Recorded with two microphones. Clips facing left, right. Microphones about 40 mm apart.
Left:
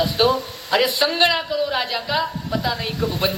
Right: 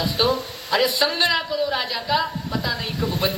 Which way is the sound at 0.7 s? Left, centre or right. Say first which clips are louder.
Left 1 dB; centre.